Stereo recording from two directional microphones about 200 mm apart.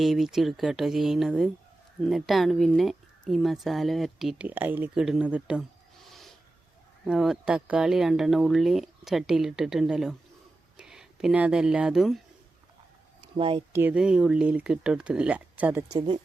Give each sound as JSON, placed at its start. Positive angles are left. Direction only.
{"t": 0.0, "sound": "speech", "side_deg": 0}
{"t": 13.2, "sound": "speech", "side_deg": -25}
{"t": 13.7, "sound": "speech", "side_deg": -5}
{"t": 16.0, "sound": "speech", "side_deg": -25}